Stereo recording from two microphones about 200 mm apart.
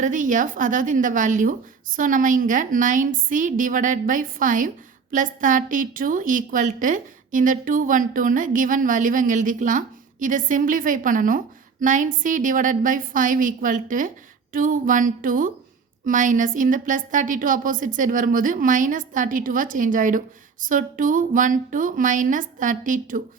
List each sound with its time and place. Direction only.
0.0 s a woman's voice: 40° right (ahead or behind)